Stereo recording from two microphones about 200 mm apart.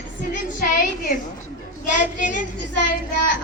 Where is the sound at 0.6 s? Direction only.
40° left (ahead or behind).